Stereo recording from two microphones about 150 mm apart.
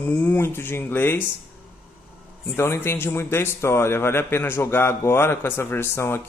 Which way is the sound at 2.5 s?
15° left (ahead or behind).